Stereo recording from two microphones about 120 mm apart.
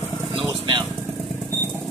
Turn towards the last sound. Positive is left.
turn(degrees=-40)  # may be behind; listen again after turning